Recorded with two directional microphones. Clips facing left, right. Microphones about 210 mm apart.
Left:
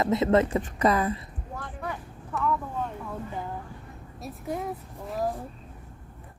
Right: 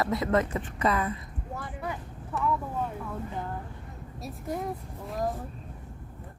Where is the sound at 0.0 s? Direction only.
25° left (ahead or behind).